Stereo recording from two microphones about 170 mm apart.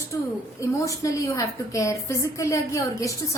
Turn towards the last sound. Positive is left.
turn(degrees=20)  # may be behind; listen again after turning